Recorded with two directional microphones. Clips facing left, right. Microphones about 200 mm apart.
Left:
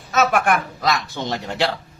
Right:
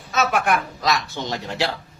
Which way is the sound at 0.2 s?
50° left (ahead or behind).